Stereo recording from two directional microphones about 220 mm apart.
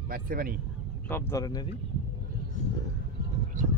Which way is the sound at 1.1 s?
10° left (ahead or behind).